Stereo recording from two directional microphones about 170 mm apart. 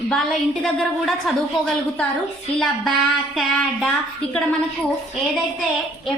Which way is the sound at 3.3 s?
Centre (ahead or behind).